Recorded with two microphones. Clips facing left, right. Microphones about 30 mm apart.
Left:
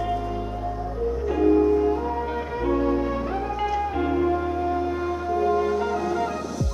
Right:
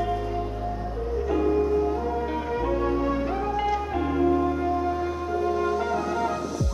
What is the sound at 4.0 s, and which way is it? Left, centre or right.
Music, centre.